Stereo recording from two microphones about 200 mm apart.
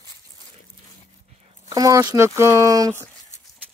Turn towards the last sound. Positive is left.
turn(degrees=-15)  # may be behind; listen again after turning